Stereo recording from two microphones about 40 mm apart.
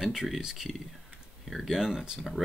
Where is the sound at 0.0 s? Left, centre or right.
Centre.